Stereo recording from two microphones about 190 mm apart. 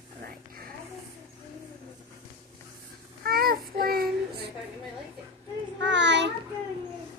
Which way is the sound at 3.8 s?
50° right (ahead or behind).